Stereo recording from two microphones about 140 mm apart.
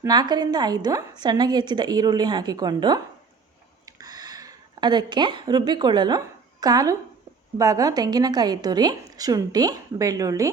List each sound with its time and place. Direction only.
0.1 s a woman's voice: 30° right (ahead or behind)
3.8 s a sound: 25° right (ahead or behind)
7.6 s a woman's voice: 25° right (ahead or behind)